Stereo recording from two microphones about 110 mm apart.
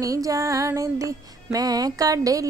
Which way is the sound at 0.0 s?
30° right (ahead or behind).